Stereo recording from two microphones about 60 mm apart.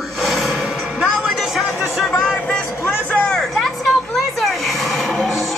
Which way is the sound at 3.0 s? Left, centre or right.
Left.